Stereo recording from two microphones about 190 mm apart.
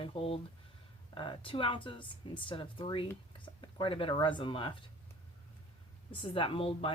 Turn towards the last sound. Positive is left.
turn(degrees=30)  # may be behind; listen again after turning